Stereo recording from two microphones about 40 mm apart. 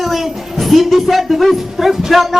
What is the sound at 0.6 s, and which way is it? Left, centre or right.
A woman's voice, centre.